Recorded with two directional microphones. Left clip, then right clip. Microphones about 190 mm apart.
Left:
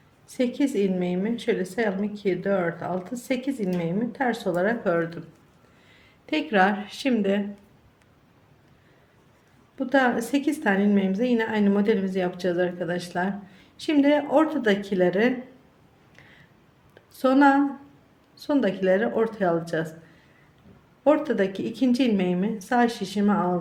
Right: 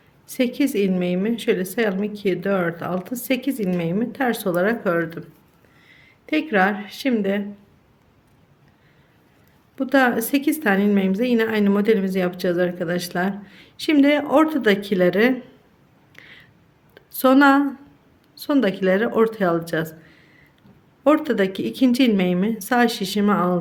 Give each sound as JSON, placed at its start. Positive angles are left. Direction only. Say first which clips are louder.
{"t": 0.3, "sound": "a woman's voice", "louder": "right 3 dB", "side_deg": -30}
{"t": 9.7, "sound": "a woman's voice", "louder": "right 4 dB", "side_deg": -30}
{"t": 16.1, "sound": "a sound", "louder": "right 8 dB", "side_deg": -30}
{"t": 18.3, "sound": "a woman's voice", "louder": "right 4 dB", "side_deg": -35}
{"t": 21.0, "sound": "a woman's voice", "louder": "right 3 dB", "side_deg": -30}